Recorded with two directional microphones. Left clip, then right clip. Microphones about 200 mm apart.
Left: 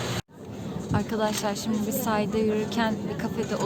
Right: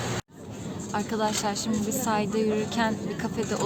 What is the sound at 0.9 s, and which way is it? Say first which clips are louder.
A woman's voice: even; centre (ahead or behind).